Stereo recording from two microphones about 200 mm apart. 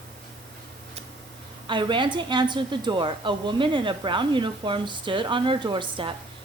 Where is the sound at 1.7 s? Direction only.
25° right (ahead or behind).